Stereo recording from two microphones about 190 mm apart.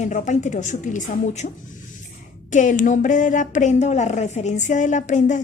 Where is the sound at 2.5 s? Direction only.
40° left (ahead or behind).